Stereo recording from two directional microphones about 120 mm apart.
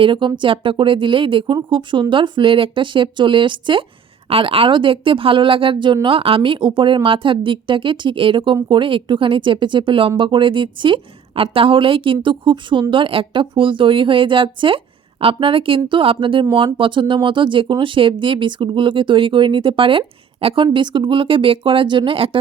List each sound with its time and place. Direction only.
0.0 s speech: 45° right (ahead or behind)